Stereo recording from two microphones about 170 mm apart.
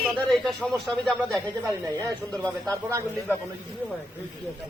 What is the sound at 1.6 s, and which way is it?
Speech, 15° right (ahead or behind).